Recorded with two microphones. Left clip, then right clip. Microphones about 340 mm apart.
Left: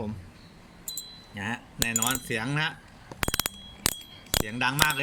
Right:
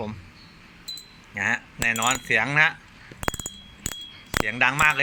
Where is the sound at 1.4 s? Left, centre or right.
Centre.